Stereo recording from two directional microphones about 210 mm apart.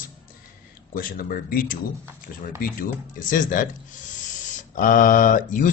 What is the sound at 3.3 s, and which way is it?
Speech, 40° left (ahead or behind).